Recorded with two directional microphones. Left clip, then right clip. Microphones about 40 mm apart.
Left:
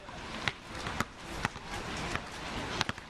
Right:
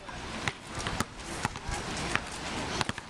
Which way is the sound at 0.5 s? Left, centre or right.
Left.